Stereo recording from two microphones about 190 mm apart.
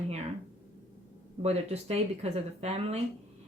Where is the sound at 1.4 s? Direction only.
35° right (ahead or behind).